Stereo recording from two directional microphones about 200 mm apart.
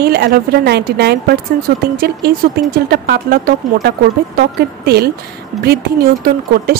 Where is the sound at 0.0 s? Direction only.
50° right (ahead or behind).